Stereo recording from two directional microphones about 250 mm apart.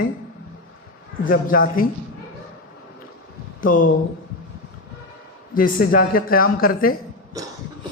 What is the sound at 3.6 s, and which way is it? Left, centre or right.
Speech, left.